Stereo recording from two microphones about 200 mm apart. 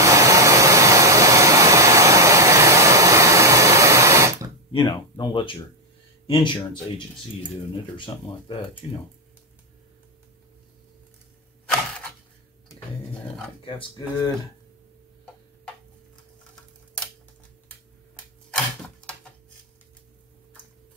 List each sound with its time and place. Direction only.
0.0 s hair dryer: 15° right (ahead or behind)
4.7 s speech: 25° left (ahead or behind)
8.1 s speech: 20° left (ahead or behind)
13.7 s speech: 25° left (ahead or behind)